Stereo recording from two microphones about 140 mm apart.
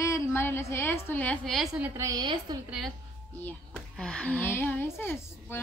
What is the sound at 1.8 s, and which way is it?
Speech, 20° right (ahead or behind).